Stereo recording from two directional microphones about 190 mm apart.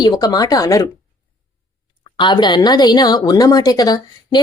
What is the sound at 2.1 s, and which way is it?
Speech, 25° left (ahead or behind).